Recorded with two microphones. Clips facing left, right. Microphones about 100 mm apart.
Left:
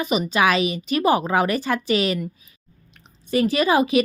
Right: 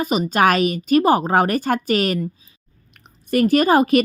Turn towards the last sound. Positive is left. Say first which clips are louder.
# right 3 dB
turn(degrees=-50)  # may be behind; listen again after turning